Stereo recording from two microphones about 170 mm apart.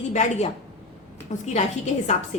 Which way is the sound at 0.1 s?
40° left (ahead or behind).